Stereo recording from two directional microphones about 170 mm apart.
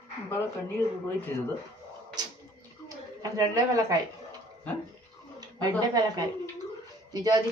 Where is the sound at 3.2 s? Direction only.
20° right (ahead or behind).